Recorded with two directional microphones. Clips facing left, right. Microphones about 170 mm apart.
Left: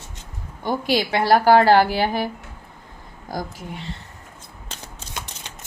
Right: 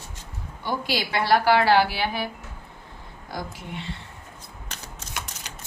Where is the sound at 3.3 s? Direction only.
40° left (ahead or behind).